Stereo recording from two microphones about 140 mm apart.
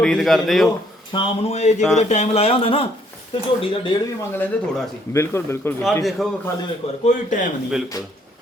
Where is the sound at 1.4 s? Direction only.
55° left (ahead or behind).